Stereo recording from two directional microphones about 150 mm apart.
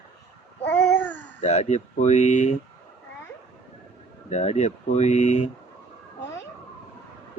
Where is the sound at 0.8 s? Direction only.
10° left (ahead or behind).